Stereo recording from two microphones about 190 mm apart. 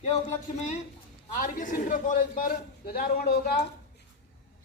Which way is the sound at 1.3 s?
45° left (ahead or behind).